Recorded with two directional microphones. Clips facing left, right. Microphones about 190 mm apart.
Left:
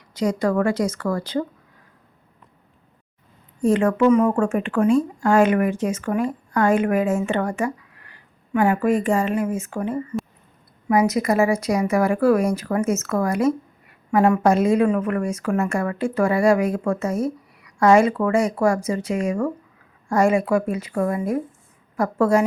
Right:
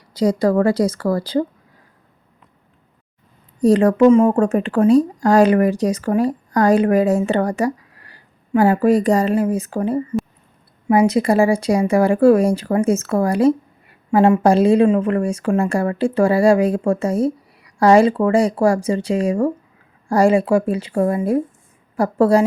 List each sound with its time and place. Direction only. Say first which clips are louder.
0.1 s speech: right 5 dB; 35° right (ahead or behind)
3.6 s speech: right 5 dB; 35° right (ahead or behind)